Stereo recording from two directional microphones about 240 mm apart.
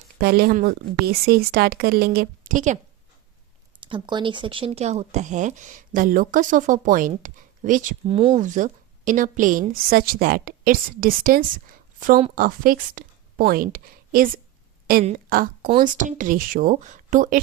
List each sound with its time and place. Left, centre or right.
0.2 s a woman's voice: right
3.8 s a woman's voice: right
8.1 s a woman's voice: right